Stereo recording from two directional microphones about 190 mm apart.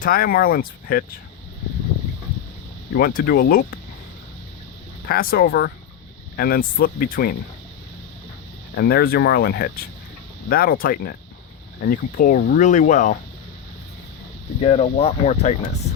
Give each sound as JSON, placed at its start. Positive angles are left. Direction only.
{"t": 0.0, "sound": "speech", "side_deg": 50}
{"t": 2.9, "sound": "speech", "side_deg": 50}
{"t": 5.0, "sound": "speech", "side_deg": 50}
{"t": 8.7, "sound": "speech", "side_deg": 55}
{"t": 14.6, "sound": "speech", "side_deg": 35}